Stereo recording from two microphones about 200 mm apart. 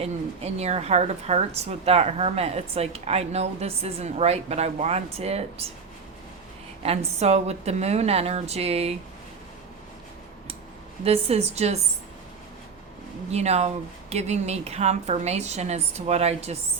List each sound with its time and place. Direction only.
0.0 s a woman's voice: 30° right (ahead or behind)
6.8 s a woman's voice: 30° right (ahead or behind)
11.0 s a woman's voice: 30° right (ahead or behind)
13.3 s a woman's voice: 35° right (ahead or behind)